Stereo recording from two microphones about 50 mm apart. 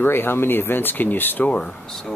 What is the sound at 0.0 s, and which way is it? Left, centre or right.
Speech, left.